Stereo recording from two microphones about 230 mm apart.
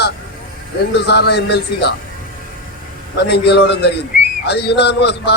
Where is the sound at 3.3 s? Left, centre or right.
Left.